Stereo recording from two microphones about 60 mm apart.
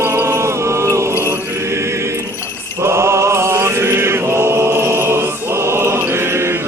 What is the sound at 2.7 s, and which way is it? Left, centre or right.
Mantra, right.